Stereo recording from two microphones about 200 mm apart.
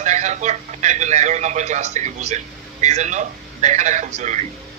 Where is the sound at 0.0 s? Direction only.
35° right (ahead or behind).